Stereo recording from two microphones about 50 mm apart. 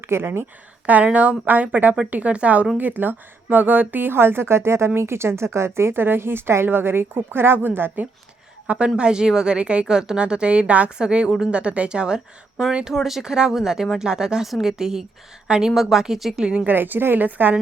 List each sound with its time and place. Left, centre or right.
0.1 s a woman's voice: right
1.0 s a woman's voice: right
2.7 s a woman's voice: right
8.6 s speech: right
9.0 s a woman's voice: centre
16.4 s a woman's voice: right
16.6 s a woman's voice: right